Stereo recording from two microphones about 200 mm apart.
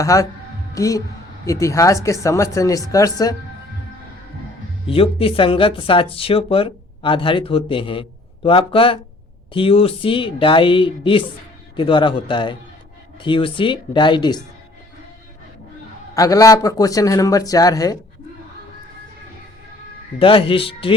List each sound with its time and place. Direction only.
0.0 s speech: 15° left (ahead or behind)
4.9 s speech: 30° left (ahead or behind)
16.1 s speech: 15° left (ahead or behind)
20.1 s speech: 25° left (ahead or behind)